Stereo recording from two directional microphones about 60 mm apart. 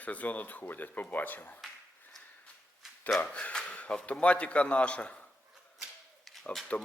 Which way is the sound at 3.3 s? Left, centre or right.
Centre.